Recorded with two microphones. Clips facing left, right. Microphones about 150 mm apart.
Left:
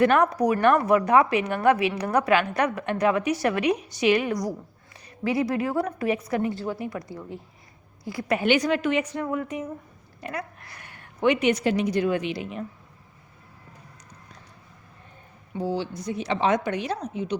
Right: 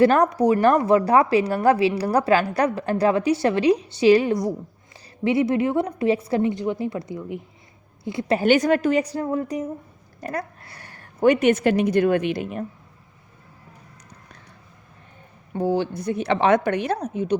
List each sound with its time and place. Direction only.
0.0 s a woman's voice: 35° right (ahead or behind)
8.4 s a woman's voice: 45° right (ahead or behind)
10.6 s a woman's voice: 30° right (ahead or behind); by 12.6 s 50° right (ahead or behind)
15.5 s a woman's voice: 55° right (ahead or behind)